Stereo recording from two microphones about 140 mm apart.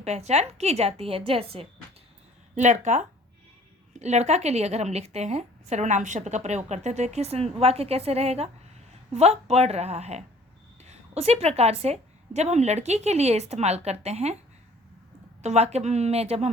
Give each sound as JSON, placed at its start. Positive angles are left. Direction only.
{"t": 0.0, "sound": "a woman's voice", "side_deg": -50}
{"t": 2.6, "sound": "a woman's voice", "side_deg": -60}
{"t": 15.4, "sound": "a woman's voice", "side_deg": -50}